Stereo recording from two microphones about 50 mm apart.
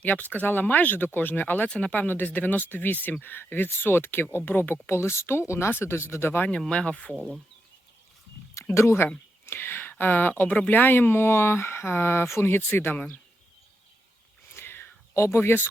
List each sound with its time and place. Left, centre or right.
0.0 s speech: left
1.6 s speech: left
2.0 s speech: left
6.7 s speech: left
7.1 s speech: centre
8.7 s speech: left
9.5 s a sound: left
10.0 s speech: left
14.5 s whispering: left
15.2 s speech: left